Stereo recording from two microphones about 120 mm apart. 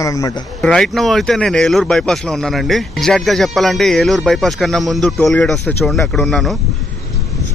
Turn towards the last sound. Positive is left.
turn(degrees=5)  # may be behind; listen again after turning